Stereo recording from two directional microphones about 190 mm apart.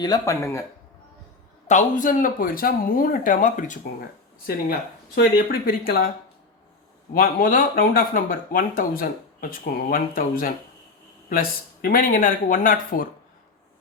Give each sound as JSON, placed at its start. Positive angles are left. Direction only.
{"t": 0.0, "sound": "speech", "side_deg": 20}
{"t": 1.6, "sound": "speech", "side_deg": 40}
{"t": 4.4, "sound": "speech", "side_deg": 55}
{"t": 7.1, "sound": "speech", "side_deg": 50}